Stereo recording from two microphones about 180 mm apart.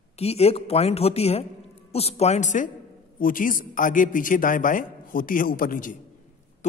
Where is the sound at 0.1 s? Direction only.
35° left (ahead or behind).